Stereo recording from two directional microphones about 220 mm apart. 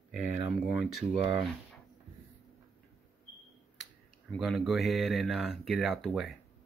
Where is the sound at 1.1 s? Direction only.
25° right (ahead or behind).